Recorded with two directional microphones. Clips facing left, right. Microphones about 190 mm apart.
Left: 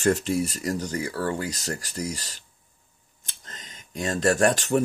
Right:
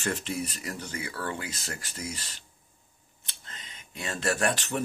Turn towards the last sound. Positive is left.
turn(degrees=40)  # may be behind; listen again after turning